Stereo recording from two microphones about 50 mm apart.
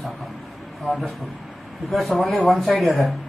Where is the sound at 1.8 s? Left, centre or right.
Centre.